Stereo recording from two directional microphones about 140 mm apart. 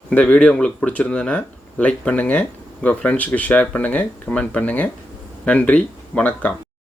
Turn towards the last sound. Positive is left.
turn(degrees=10)  # may be behind; listen again after turning